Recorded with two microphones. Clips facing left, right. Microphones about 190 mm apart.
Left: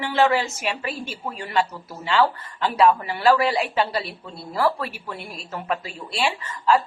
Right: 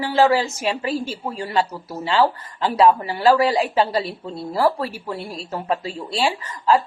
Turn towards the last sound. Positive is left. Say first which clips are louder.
# right 2 dB
turn(degrees=-35)  # may be behind; listen again after turning